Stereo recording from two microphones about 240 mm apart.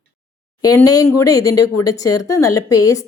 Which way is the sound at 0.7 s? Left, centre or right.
Centre.